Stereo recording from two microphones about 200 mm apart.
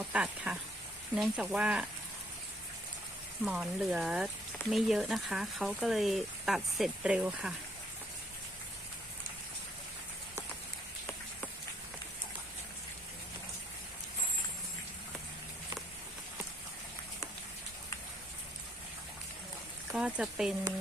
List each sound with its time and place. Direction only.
0.0 s speech: 5° right (ahead or behind)
3.4 s speech: centre (ahead or behind)
19.9 s speech: 5° right (ahead or behind)